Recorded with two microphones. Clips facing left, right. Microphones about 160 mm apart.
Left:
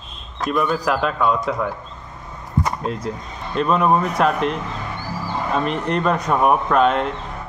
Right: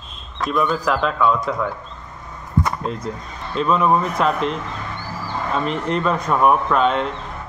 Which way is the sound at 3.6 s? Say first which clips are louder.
Even; 55° left (ahead or behind).